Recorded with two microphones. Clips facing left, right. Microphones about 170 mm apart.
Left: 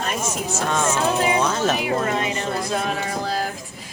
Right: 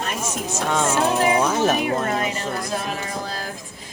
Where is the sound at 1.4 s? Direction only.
10° right (ahead or behind).